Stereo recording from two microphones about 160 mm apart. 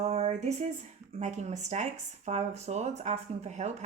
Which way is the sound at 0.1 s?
45° right (ahead or behind).